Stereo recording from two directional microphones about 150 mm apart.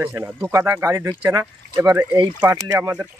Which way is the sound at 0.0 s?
10° right (ahead or behind).